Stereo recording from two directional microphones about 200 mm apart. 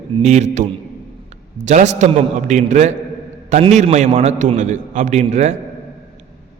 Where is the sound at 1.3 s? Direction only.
35° right (ahead or behind).